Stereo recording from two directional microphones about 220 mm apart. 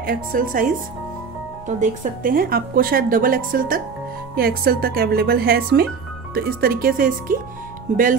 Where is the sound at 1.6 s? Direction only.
35° right (ahead or behind).